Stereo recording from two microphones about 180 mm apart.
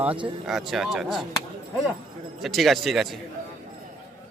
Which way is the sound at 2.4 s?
Centre (ahead or behind).